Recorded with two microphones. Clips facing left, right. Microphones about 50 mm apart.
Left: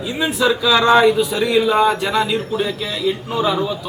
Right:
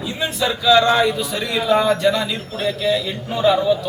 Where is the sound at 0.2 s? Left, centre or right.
Centre.